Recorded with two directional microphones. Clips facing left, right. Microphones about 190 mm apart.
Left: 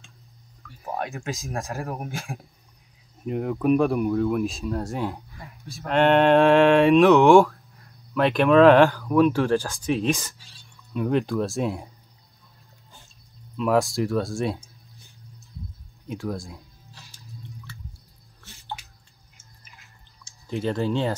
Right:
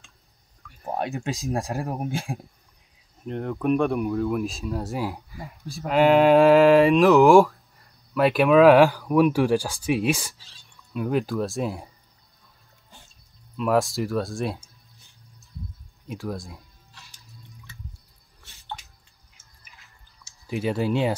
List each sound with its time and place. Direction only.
0.9 s speech: 30° right (ahead or behind)
3.3 s speech: 5° left (ahead or behind)
5.4 s speech: 35° right (ahead or behind)
5.9 s speech: 5° right (ahead or behind)
13.6 s speech: centre (ahead or behind)
16.1 s speech: centre (ahead or behind)
20.2 s speech: 10° right (ahead or behind)